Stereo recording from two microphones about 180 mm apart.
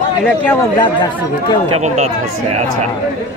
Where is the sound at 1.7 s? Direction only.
40° right (ahead or behind).